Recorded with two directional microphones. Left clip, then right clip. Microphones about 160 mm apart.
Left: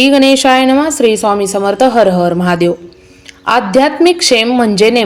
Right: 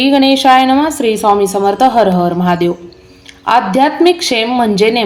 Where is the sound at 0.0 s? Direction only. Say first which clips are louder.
Left 2 dB; 45° left (ahead or behind).